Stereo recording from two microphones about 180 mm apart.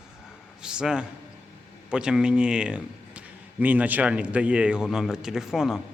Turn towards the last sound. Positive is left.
turn(degrees=0)  # may be behind; listen again after turning